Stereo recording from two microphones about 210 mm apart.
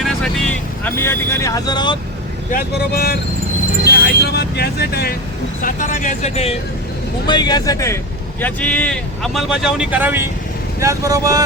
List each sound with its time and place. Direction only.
0.0 s vehicle: 5° left (ahead or behind); by 2.0 s 20° left (ahead or behind)
2.5 s speech: 45° left (ahead or behind)
5.6 s speech: 40° left (ahead or behind)
7.3 s speech: 20° left (ahead or behind); by 11.4 s 15° right (ahead or behind)